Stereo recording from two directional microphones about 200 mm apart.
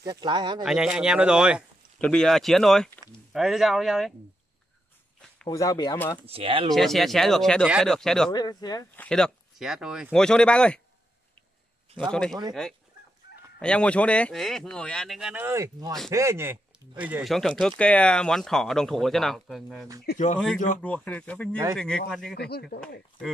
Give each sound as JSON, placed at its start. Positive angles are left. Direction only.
{"t": 0.0, "sound": "speech", "side_deg": -20}
{"t": 0.7, "sound": "speech", "side_deg": -5}
{"t": 5.5, "sound": "speech", "side_deg": 15}
{"t": 6.2, "sound": "speech", "side_deg": -30}
{"t": 6.7, "sound": "speech", "side_deg": 0}
{"t": 8.3, "sound": "speech", "side_deg": 20}
{"t": 9.0, "sound": "speech", "side_deg": 5}
{"t": 12.1, "sound": "speech", "side_deg": 5}
{"t": 13.6, "sound": "speech", "side_deg": 5}
{"t": 22.3, "sound": "speech", "side_deg": 50}